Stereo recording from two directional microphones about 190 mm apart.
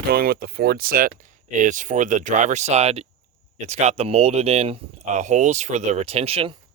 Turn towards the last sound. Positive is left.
turn(degrees=-30)  # may be behind; listen again after turning